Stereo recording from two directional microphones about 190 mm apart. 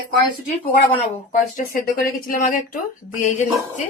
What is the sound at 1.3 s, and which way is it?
Speech, 45° left (ahead or behind).